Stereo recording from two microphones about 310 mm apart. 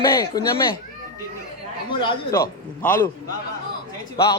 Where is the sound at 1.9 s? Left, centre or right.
Centre.